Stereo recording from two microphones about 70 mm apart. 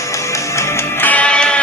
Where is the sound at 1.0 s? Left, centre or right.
Left.